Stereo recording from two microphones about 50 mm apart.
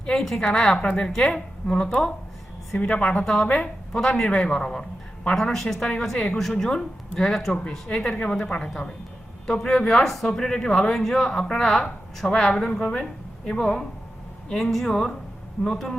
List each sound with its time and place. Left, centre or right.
0.2 s speech: centre
0.8 s a woman's voice: left
1.0 s speech: centre
2.7 s a woman's voice: left
3.9 s a woman's voice: centre
7.9 s a woman's voice: centre